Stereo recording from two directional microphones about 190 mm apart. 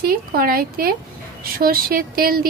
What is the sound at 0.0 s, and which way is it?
A woman's voice, 50° right (ahead or behind).